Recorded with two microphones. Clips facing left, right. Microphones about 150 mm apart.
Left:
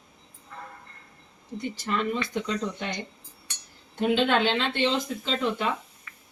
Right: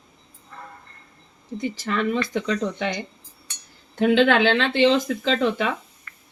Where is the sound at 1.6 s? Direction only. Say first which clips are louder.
Right 4 dB; 90° right.